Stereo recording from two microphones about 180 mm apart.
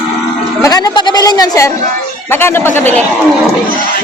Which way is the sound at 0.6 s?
20° left (ahead or behind).